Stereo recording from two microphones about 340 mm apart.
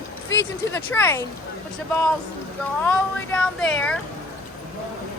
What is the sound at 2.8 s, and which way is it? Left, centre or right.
Speech, centre.